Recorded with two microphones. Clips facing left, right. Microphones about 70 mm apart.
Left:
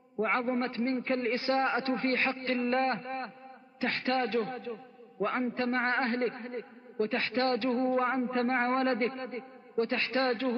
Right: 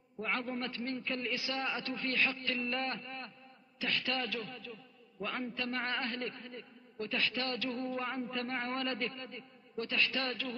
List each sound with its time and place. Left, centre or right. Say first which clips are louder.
0.2 s a man's voice: left 8 dB; left